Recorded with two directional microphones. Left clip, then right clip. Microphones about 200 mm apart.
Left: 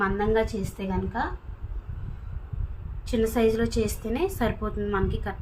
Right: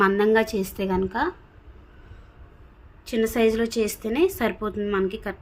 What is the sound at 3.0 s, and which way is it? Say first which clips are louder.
A woman's voice: right 2 dB; 40° right (ahead or behind).